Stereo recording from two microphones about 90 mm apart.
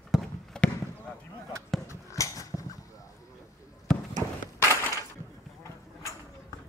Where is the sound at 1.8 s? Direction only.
35° left (ahead or behind).